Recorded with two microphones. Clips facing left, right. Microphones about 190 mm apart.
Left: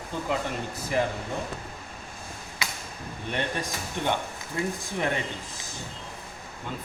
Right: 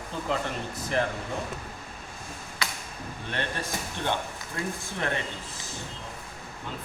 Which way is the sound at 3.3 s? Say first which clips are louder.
Left 2 dB; 15° left (ahead or behind).